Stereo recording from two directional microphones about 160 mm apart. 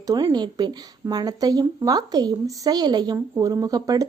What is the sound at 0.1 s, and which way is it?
Speech, 25° right (ahead or behind).